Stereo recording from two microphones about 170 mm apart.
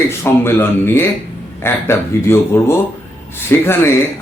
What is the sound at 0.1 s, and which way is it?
Speech, 15° left (ahead or behind).